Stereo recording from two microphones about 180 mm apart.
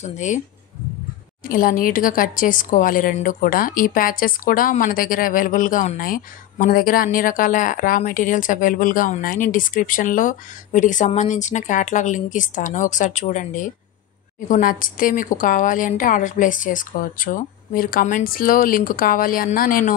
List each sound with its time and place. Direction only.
0.0 s speech: 40° left (ahead or behind)
1.4 s speech: 50° left (ahead or behind)